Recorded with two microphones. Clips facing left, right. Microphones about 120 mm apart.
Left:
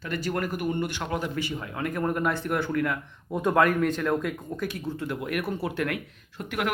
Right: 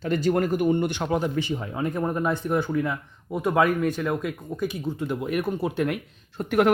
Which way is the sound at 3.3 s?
5° right (ahead or behind).